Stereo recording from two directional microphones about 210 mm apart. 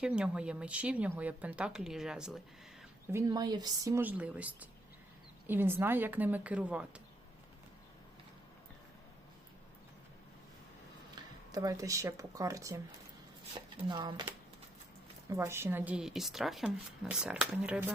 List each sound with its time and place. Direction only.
0.0 s speech: 5° right (ahead or behind)
3.1 s speech: 15° right (ahead or behind)
11.1 s speech: 15° right (ahead or behind)
15.3 s speech: 15° right (ahead or behind)